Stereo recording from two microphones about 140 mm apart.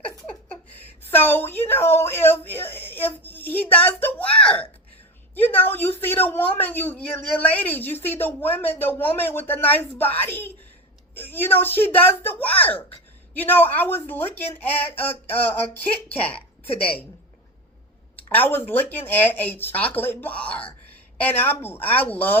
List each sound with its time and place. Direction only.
1.1 s a woman's voice: 15° left (ahead or behind)
18.2 s a woman's voice: 10° left (ahead or behind)